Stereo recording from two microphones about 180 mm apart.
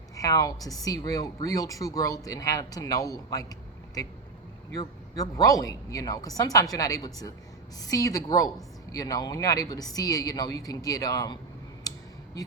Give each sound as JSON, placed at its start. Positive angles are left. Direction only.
{"t": 0.2, "sound": "a woman's voice", "side_deg": 20}
{"t": 11.8, "sound": "tick", "side_deg": 20}